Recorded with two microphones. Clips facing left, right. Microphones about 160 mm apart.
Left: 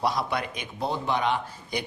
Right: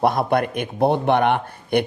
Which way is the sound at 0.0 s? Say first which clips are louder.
Right 9 dB; 55° right (ahead or behind).